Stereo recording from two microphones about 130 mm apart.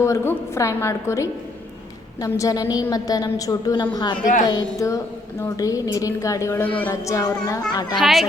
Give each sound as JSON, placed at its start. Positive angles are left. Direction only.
{"t": 0.0, "sound": "a woman's voice", "side_deg": 20}
{"t": 6.9, "sound": "a woman's voice", "side_deg": 25}
{"t": 7.9, "sound": "speech", "side_deg": 0}